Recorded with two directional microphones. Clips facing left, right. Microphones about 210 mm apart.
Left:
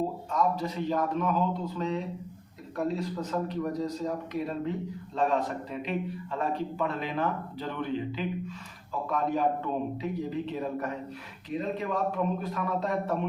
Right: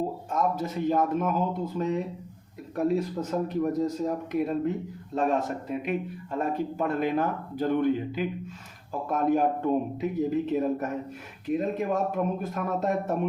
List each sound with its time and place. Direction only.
0.3 s speech: 50° right (ahead or behind)